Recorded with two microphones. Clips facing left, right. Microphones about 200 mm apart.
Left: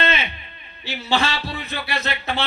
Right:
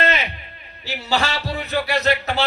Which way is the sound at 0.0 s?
40° right (ahead or behind).